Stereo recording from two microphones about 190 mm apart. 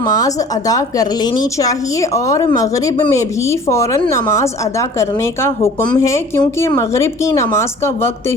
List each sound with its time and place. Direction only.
0.0 s a woman's voice: 20° left (ahead or behind)